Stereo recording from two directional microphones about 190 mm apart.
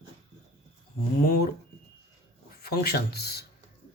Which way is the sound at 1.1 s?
50° left (ahead or behind).